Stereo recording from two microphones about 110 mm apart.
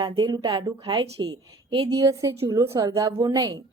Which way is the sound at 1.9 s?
30° right (ahead or behind).